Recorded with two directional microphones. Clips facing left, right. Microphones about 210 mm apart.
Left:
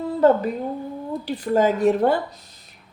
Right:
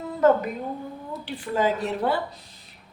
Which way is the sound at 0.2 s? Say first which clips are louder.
Left 2 dB; 30° left (ahead or behind).